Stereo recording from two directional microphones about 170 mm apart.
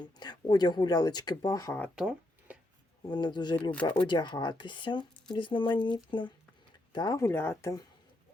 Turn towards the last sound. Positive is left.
turn(degrees=15)  # may be behind; listen again after turning